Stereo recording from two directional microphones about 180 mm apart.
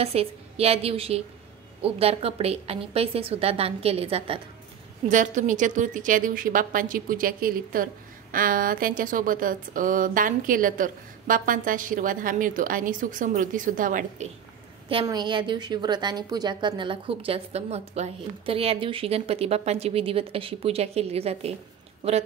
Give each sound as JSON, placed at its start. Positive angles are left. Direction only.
{"t": 0.0, "sound": "speech", "side_deg": -35}
{"t": 5.0, "sound": "a woman's voice", "side_deg": -45}
{"t": 15.0, "sound": "speech", "side_deg": -25}